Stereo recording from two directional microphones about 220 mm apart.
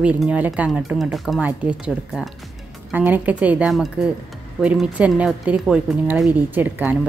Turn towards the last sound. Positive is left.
turn(degrees=-10)  # may be behind; listen again after turning